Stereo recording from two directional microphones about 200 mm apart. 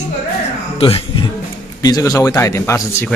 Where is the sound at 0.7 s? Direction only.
30° left (ahead or behind).